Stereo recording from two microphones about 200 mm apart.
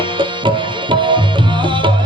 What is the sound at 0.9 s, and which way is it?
Tabla, 25° right (ahead or behind).